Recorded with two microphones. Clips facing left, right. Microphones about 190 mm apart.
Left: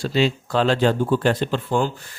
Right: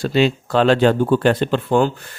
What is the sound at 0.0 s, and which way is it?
Speech, 60° right (ahead or behind).